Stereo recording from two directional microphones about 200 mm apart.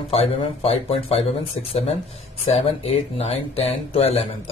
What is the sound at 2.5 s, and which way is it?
Speech, 30° left (ahead or behind).